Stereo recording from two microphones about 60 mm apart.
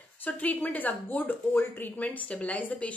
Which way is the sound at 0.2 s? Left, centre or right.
Left.